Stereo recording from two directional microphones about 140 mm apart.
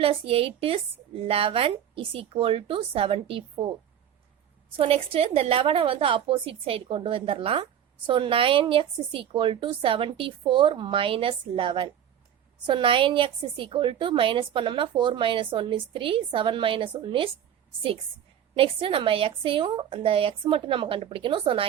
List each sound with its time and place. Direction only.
0.0 s a woman's voice: 45° right (ahead or behind)
4.8 s a woman's voice: 40° right (ahead or behind)
18.5 s a woman's voice: 40° right (ahead or behind)